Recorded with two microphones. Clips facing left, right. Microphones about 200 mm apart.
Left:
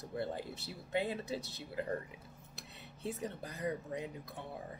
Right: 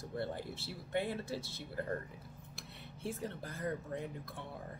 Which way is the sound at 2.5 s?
20° left (ahead or behind).